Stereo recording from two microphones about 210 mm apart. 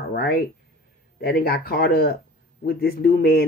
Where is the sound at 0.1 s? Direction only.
45° left (ahead or behind).